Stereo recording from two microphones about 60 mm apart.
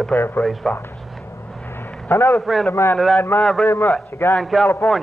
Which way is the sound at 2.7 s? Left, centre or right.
Left.